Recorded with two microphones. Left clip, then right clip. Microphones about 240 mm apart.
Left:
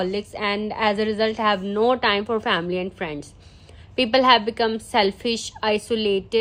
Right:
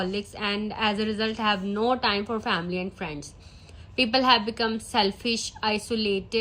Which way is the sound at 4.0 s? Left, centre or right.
Left.